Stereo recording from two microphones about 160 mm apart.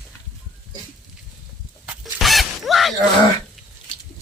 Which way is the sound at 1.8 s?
Centre (ahead or behind).